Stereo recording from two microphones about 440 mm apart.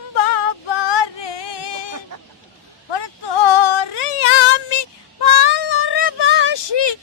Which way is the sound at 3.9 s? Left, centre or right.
Left.